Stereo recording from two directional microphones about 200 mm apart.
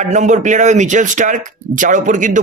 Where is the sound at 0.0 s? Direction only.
35° right (ahead or behind).